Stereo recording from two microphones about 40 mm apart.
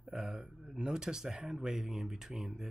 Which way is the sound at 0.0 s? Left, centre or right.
Centre.